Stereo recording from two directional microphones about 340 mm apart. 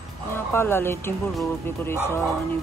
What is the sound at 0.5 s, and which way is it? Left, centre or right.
Speech, centre.